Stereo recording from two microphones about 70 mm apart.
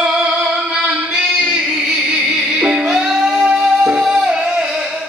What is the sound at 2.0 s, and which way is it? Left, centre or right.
Music, centre.